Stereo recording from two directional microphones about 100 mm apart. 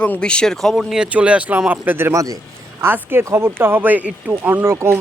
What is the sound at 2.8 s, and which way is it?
Speech, 20° right (ahead or behind).